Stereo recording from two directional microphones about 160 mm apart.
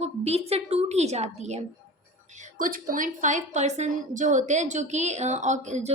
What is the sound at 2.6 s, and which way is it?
A woman's voice, 60° right (ahead or behind).